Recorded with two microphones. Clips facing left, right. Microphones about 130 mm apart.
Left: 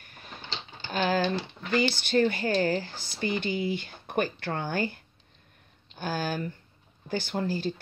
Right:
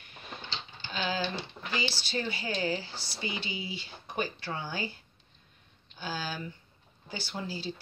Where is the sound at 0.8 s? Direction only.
50° left (ahead or behind).